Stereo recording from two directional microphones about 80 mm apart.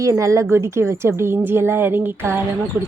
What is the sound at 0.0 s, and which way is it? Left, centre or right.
A woman's voice, right.